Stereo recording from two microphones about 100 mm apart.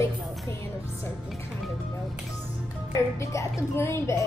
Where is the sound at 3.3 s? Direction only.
30° left (ahead or behind).